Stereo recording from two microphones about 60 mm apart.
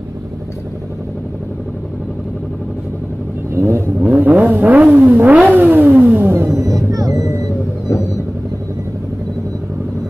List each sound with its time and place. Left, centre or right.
3.5 s vehicle: right
4.0 s vehicle: right
6.3 s music: right
6.6 s music: right
7.9 s vehicle: left